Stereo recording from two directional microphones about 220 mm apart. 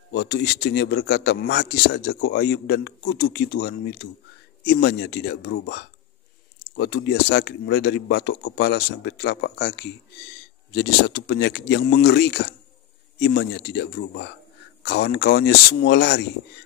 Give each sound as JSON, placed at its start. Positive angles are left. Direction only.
{"t": 0.1, "sound": "a man's voice", "side_deg": 50}